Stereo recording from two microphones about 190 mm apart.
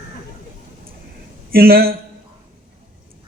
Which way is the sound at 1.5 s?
50° right (ahead or behind).